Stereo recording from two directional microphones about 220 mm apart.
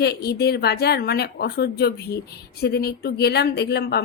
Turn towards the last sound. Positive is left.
turn(degrees=45)  # may be behind; listen again after turning